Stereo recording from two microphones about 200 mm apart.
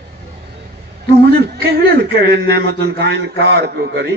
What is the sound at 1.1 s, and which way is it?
A man's voice, 55° right (ahead or behind).